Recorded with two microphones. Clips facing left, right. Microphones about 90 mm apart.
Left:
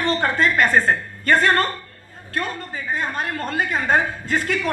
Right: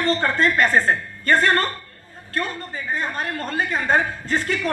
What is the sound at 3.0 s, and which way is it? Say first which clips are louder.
A woman's voice: left 2 dB; 25° left (ahead or behind).